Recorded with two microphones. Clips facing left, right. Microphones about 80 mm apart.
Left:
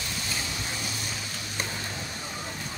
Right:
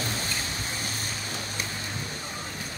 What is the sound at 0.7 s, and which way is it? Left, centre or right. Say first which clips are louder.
Vehicle: right 1 dB; right.